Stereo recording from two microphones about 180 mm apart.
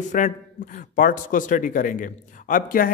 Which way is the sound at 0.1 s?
45° left (ahead or behind).